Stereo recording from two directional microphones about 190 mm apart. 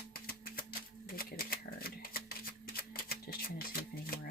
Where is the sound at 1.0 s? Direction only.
50° left (ahead or behind).